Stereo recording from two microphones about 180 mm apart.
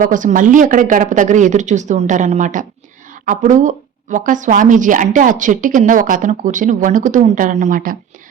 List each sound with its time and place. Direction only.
0.0 s speech: 45° right (ahead or behind)